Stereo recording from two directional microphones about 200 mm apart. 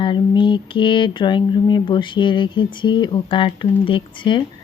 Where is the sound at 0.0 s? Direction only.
25° left (ahead or behind).